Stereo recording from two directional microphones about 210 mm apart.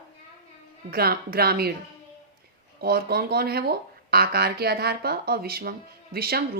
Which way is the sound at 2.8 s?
50° right (ahead or behind).